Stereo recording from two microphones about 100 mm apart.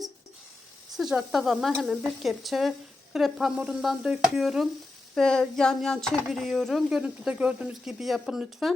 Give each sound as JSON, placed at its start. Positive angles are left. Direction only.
{"t": 0.9, "sound": "stir", "side_deg": -5}
{"t": 7.0, "sound": "stir", "side_deg": -10}